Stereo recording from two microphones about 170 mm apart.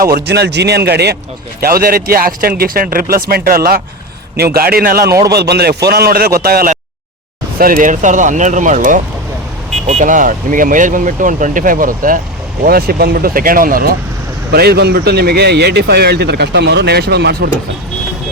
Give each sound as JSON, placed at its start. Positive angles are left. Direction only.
{"t": 0.0, "sound": "speech", "side_deg": -70}
{"t": 1.6, "sound": "speech", "side_deg": -60}
{"t": 5.2, "sound": "speech", "side_deg": -75}